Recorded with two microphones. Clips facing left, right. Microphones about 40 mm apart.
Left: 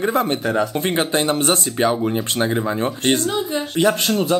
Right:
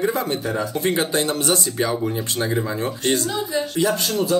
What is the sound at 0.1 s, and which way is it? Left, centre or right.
Speech, left.